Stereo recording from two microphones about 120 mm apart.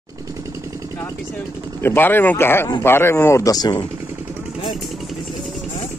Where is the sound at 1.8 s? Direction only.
20° left (ahead or behind).